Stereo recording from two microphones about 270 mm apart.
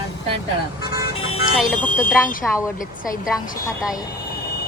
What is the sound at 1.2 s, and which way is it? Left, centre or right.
Vehicle, left.